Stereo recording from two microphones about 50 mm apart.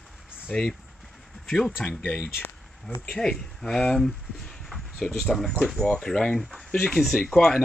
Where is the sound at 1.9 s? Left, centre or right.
Left.